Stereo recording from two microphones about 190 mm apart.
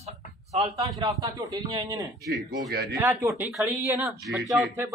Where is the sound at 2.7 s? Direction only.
55° right (ahead or behind).